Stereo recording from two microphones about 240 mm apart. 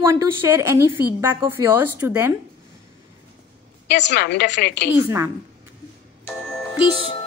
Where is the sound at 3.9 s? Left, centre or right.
Left.